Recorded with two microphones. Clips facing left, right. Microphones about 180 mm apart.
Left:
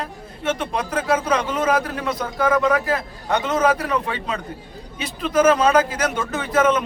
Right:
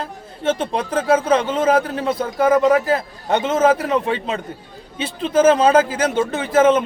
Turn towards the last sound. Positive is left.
turn(degrees=-25)  # may be behind; listen again after turning